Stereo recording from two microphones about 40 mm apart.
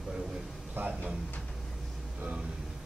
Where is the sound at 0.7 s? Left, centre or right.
Right.